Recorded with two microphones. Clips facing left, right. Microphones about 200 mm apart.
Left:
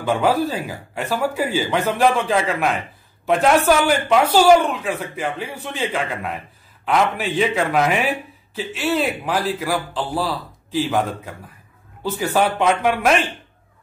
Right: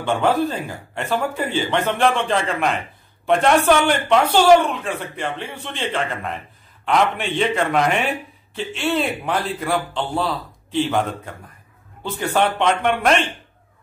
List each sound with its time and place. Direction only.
0.0 s a man's voice: 5° left (ahead or behind)